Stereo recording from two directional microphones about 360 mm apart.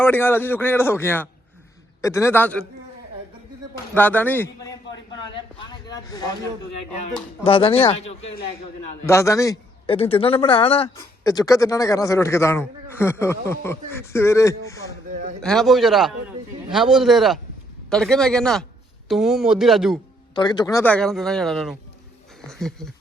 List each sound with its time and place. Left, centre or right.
0.0 s a man's voice: centre
3.9 s a man's voice: centre
20.3 s speech: centre